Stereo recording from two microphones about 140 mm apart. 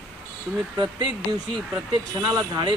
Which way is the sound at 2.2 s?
30° right (ahead or behind).